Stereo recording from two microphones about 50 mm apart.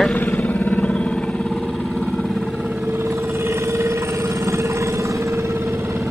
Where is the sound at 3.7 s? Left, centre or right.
Right.